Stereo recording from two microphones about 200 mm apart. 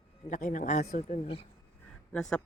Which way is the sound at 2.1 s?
5° left (ahead or behind).